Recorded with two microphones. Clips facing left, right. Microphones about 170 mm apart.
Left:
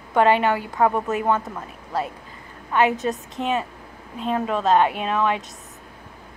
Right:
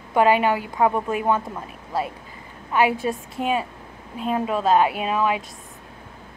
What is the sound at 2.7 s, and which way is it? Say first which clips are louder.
Speech: even; 10° right (ahead or behind).